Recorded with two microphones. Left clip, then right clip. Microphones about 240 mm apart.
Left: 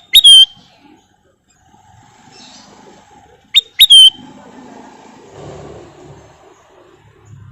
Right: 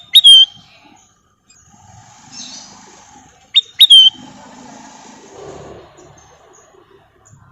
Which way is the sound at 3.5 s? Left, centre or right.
Centre.